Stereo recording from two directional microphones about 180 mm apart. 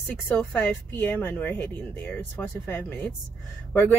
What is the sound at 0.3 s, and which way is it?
Speech, 10° left (ahead or behind).